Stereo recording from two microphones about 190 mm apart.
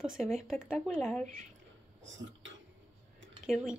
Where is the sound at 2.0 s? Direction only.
80° right.